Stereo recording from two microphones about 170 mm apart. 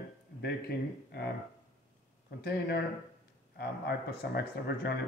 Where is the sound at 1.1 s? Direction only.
70° left (ahead or behind).